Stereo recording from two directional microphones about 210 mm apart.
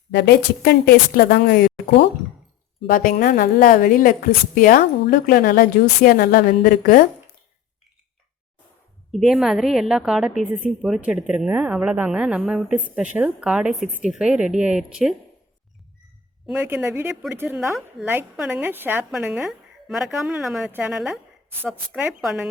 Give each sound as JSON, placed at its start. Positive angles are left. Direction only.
{"t": 0.1, "sound": "a woman's voice", "side_deg": 50}
{"t": 9.1, "sound": "a woman's voice", "side_deg": 0}
{"t": 16.5, "sound": "a woman's voice", "side_deg": -10}